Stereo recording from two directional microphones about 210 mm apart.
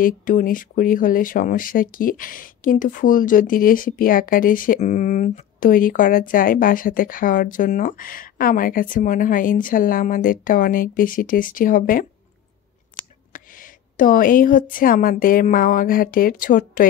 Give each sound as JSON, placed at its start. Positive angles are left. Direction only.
{"t": 0.0, "sound": "speech", "side_deg": 40}
{"t": 13.3, "sound": "a woman's voice", "side_deg": 40}